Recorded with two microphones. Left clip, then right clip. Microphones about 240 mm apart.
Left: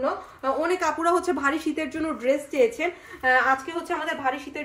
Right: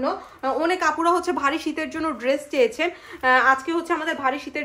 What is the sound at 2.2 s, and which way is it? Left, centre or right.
A woman's voice, right.